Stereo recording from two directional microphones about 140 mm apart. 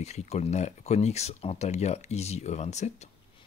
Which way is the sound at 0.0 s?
50° left (ahead or behind).